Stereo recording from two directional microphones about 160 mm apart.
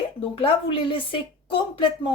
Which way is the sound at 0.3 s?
35° left (ahead or behind).